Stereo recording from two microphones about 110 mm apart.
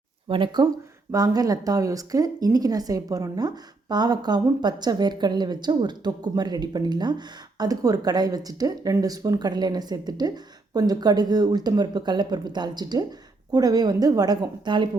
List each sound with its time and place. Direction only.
0.3 s speech: 50° right (ahead or behind)